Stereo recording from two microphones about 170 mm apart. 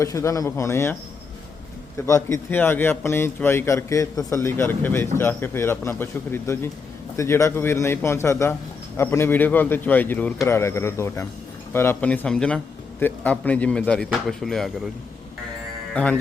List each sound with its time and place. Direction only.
0.0 s a man's voice: 20° left (ahead or behind)
2.0 s a man's voice: 15° left (ahead or behind)
15.9 s speech: 5° left (ahead or behind)